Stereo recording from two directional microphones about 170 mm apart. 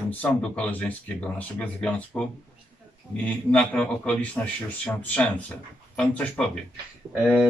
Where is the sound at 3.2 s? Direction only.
10° left (ahead or behind).